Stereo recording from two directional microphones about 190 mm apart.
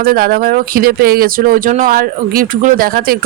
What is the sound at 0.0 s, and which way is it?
Speech, 50° right (ahead or behind).